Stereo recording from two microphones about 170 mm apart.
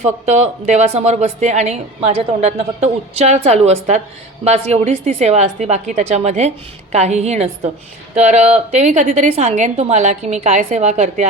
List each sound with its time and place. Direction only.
0.0 s a woman's voice: 40° right (ahead or behind)